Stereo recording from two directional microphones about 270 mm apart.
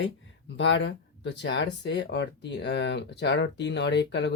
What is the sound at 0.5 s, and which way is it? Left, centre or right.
Speech, left.